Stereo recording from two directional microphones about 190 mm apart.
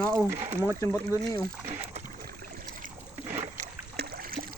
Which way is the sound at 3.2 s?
35° right (ahead or behind).